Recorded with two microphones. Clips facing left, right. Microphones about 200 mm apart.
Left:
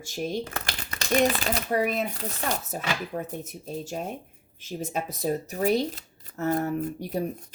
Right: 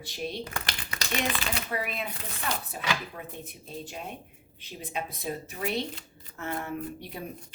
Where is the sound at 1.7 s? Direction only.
45° left (ahead or behind).